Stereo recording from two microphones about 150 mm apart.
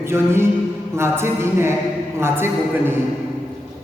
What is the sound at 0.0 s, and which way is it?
A man's voice, 15° right (ahead or behind).